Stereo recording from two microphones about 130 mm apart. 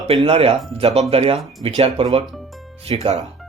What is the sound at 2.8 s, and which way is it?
Speech, 55° right (ahead or behind).